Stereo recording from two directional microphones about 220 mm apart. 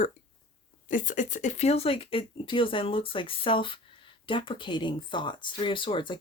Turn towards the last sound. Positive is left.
turn(degrees=20)  # may be behind; listen again after turning